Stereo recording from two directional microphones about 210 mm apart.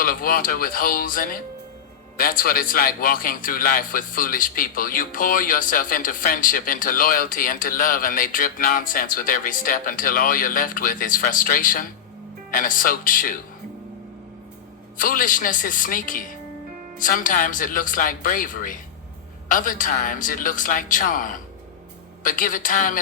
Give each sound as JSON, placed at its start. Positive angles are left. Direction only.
{"t": 0.0, "sound": "a man's voice", "side_deg": 45}
{"t": 14.9, "sound": "a man's voice", "side_deg": 40}